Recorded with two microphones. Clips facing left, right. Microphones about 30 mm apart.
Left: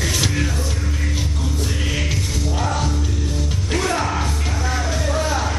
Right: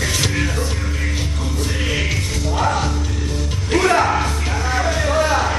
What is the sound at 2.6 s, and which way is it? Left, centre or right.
Music, centre.